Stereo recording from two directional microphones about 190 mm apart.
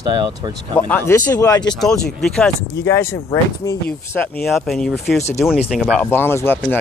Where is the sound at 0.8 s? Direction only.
10° left (ahead or behind).